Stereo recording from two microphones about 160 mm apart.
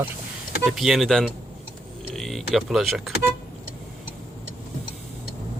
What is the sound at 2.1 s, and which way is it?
Power windows, centre (ahead or behind).